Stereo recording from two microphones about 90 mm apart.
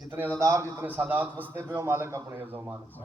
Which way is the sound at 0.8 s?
20° right (ahead or behind).